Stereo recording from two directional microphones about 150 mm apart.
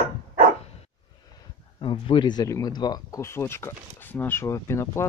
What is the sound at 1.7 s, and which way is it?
Speech, 35° left (ahead or behind).